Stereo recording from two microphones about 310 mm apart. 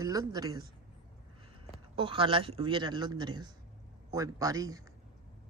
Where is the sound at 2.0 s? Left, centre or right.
Centre.